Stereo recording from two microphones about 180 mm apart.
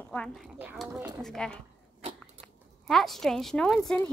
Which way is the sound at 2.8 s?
Centre (ahead or behind).